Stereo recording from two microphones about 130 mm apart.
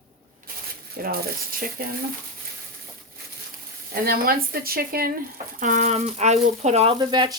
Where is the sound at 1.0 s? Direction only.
90° right.